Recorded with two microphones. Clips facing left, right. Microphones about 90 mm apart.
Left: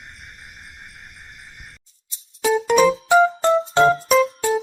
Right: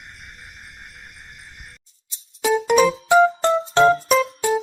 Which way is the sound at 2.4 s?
Centre (ahead or behind).